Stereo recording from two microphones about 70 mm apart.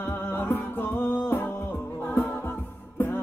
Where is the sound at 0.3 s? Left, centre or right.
Left.